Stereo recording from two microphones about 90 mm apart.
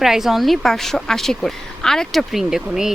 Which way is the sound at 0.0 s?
5° right (ahead or behind).